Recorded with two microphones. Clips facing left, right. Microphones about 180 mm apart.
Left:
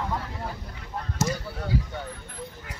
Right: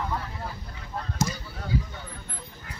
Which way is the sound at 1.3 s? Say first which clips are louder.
Left 6 dB; 60° left (ahead or behind).